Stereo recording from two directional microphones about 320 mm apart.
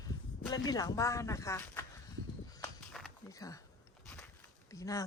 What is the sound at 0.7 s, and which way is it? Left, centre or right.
Speech, centre.